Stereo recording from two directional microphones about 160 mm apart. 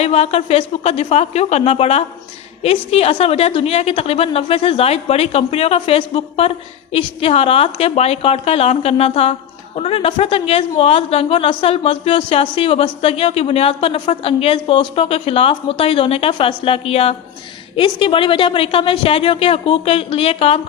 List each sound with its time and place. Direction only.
0.0 s a woman's voice: 40° left (ahead or behind)